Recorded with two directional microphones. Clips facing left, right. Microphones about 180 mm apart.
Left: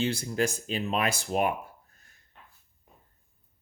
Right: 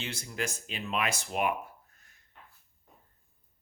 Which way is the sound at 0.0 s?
30° left (ahead or behind).